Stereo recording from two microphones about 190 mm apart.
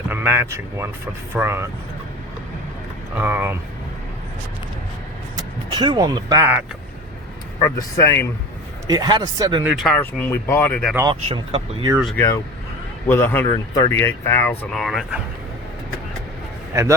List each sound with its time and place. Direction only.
0.1 s speech: 10° right (ahead or behind)
3.2 s speech: 10° right (ahead or behind)
5.7 s speech: 20° right (ahead or behind)
7.6 s speech: 15° left (ahead or behind)
8.9 s speech: 20° right (ahead or behind)
9.6 s speech: centre (ahead or behind)
11.1 s speech: 30° right (ahead or behind)
11.9 s speech: centre (ahead or behind)